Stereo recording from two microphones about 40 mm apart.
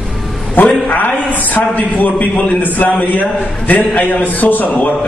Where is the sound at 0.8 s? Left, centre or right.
Left.